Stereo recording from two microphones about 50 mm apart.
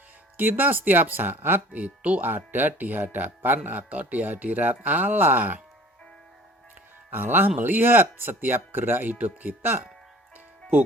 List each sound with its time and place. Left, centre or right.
0.3 s speech: right
1.7 s speech: right
2.3 s speech: right
7.1 s speech: right